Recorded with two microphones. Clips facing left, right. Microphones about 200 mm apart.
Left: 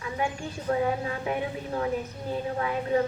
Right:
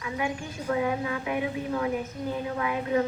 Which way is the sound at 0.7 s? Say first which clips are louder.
Even; 35° left (ahead or behind).